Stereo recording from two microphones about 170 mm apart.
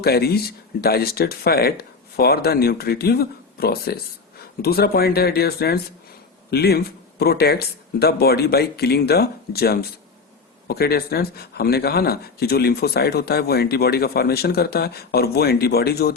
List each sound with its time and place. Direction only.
0.0 s speech: 70° left (ahead or behind)